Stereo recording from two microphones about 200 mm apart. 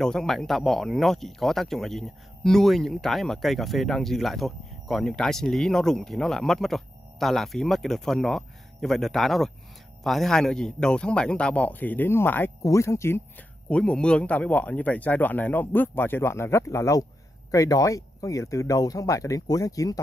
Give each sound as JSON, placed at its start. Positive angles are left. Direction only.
{"t": 0.0, "sound": "speech", "side_deg": 5}